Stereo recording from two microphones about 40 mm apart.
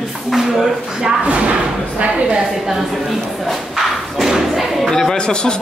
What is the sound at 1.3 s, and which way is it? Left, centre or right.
Speech, right.